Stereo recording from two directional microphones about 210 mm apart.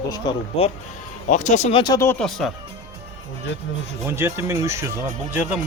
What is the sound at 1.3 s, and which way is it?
Speech, 35° left (ahead or behind).